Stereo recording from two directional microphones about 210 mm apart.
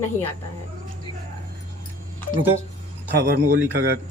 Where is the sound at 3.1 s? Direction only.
50° right (ahead or behind).